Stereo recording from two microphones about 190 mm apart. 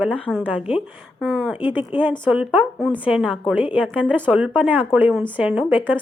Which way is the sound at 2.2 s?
5° right (ahead or behind).